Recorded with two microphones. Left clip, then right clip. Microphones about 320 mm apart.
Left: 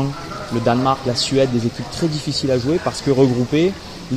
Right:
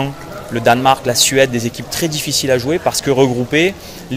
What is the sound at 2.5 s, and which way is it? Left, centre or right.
Speech, right.